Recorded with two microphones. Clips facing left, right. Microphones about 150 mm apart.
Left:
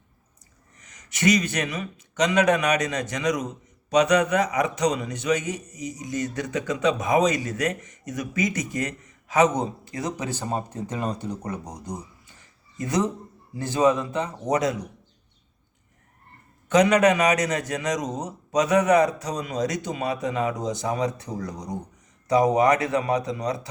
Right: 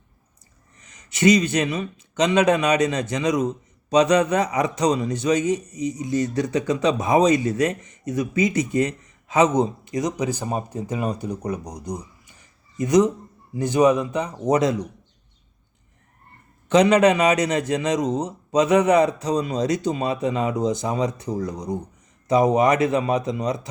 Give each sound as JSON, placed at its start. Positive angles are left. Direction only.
{"t": 0.8, "sound": "a man's voice", "side_deg": -25}
{"t": 16.6, "sound": "a man's voice", "side_deg": -25}